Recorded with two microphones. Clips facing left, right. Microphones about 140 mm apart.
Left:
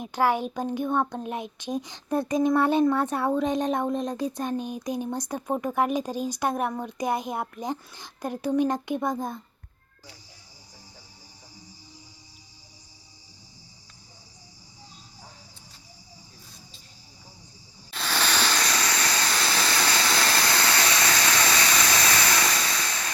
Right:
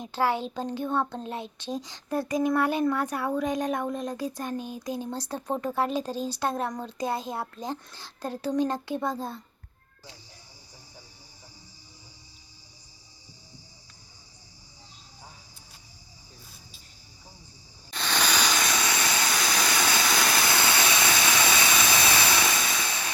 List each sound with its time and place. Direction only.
0.0 s speech: 15° left (ahead or behind)
17.9 s a sound: centre (ahead or behind)
18.2 s vehicle: 10° right (ahead or behind)